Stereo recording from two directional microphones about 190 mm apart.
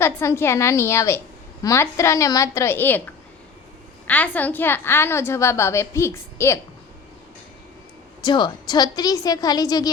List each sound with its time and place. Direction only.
0.0 s a woman's voice: 15° left (ahead or behind)
4.0 s a woman's voice: 10° left (ahead or behind)
8.2 s a woman's voice: 25° left (ahead or behind)